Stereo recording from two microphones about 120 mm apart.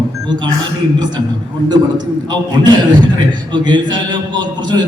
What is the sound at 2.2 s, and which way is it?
A man's voice, 40° right (ahead or behind).